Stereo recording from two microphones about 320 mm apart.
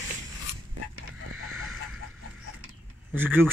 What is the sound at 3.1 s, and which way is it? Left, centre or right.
Speech, centre.